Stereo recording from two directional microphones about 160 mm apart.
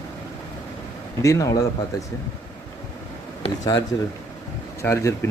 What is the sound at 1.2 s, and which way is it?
Speech, 20° left (ahead or behind).